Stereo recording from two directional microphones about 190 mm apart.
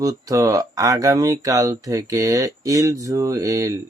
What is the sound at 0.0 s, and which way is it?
Speech, 20° right (ahead or behind).